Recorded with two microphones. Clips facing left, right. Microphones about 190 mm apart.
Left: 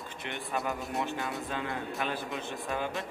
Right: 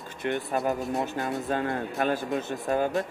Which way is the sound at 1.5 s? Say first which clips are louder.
Right 7 dB; 45° right (ahead or behind).